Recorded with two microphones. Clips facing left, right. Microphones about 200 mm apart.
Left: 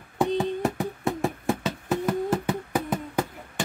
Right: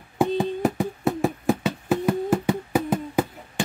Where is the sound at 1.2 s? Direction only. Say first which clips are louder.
Right 4 dB; centre (ahead or behind).